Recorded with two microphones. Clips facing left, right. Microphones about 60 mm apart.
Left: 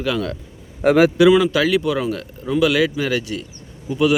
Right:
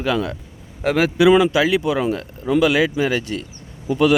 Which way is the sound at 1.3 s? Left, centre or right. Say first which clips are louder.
Right 1 dB; centre.